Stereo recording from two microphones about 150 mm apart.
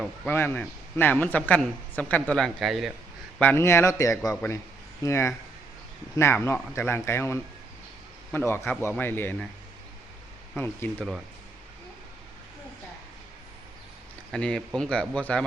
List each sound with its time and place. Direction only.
0.0 s a man's voice: 10° left (ahead or behind)
3.3 s a man's voice: 15° left (ahead or behind)
10.5 s a man's voice: 10° left (ahead or behind)
14.3 s a man's voice: 5° left (ahead or behind)